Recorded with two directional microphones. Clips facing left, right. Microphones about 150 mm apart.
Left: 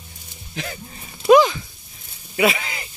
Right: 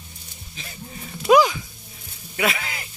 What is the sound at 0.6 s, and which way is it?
Speech, 90° left.